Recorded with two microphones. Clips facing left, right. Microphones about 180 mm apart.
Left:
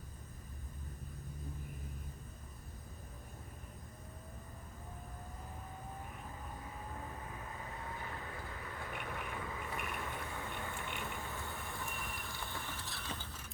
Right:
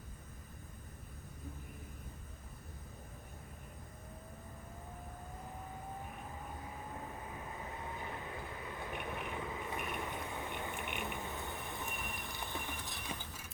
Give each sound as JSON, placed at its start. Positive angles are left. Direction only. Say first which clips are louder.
{"t": 8.8, "sound": "vehicle", "louder": "right 2 dB", "side_deg": -20}